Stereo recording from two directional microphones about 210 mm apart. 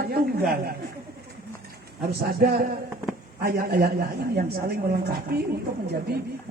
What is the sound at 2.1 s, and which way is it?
Speech, 45° right (ahead or behind).